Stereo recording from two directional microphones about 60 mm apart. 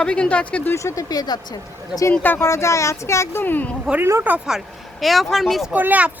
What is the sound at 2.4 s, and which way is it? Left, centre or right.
Speech, left.